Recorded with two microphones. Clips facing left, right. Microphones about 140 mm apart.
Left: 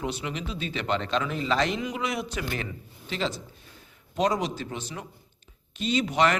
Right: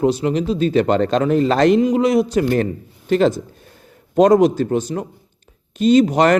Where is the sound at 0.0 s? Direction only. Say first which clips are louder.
Right 15 dB; 40° right (ahead or behind).